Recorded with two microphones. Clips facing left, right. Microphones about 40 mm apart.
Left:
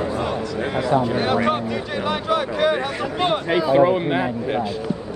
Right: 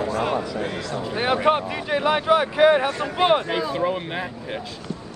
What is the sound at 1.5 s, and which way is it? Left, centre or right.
Speech, centre.